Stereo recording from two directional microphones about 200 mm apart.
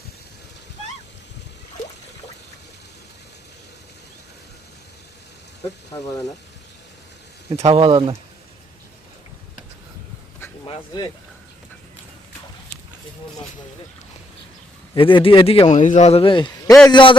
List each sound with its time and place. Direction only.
5.9 s speech: 15° left (ahead or behind)
7.6 s speech: 30° right (ahead or behind)
10.7 s speech: 25° left (ahead or behind)
14.9 s a man's voice: 25° left (ahead or behind)